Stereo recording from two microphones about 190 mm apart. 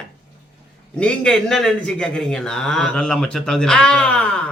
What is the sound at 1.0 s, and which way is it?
A man's voice, 5° left (ahead or behind).